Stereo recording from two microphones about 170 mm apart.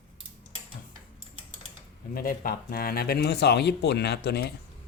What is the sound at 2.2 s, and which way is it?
Speech, 60° left (ahead or behind).